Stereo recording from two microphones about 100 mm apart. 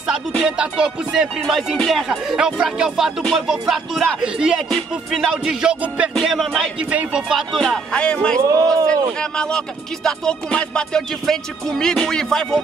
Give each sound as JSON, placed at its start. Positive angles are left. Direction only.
{"t": 0.6, "sound": "music", "side_deg": -10}
{"t": 1.8, "sound": "speech", "side_deg": 0}
{"t": 4.2, "sound": "music", "side_deg": -5}
{"t": 6.1, "sound": "speech", "side_deg": 0}
{"t": 6.8, "sound": "speech", "side_deg": -10}
{"t": 8.4, "sound": "speech", "side_deg": -35}
{"t": 8.8, "sound": "music", "side_deg": 10}